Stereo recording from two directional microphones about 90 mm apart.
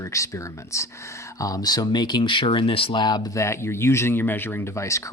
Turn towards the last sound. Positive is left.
turn(degrees=35)  # may be behind; listen again after turning